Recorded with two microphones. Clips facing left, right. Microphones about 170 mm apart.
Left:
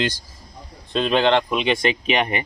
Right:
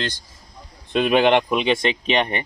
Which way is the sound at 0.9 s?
15° right (ahead or behind).